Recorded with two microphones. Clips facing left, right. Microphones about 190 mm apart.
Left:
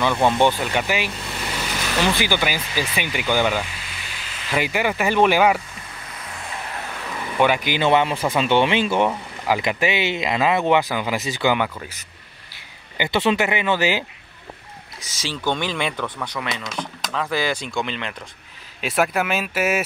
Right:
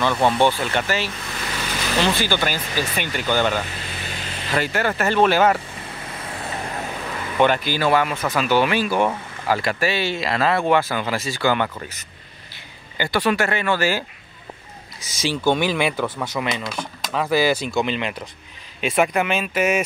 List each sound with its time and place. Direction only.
0.3 s vehicle: 15° left (ahead or behind)
2.1 s speech: 15° left (ahead or behind)
4.0 s vehicle: 40° right (ahead or behind)
4.5 s speech: 10° left (ahead or behind)
7.3 s speech: 10° left (ahead or behind)
12.9 s speech: 20° left (ahead or behind)
15.2 s speech: 10° right (ahead or behind)
18.8 s speech: centre (ahead or behind)